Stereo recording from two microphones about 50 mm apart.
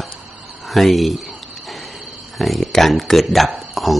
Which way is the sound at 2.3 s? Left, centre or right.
Centre.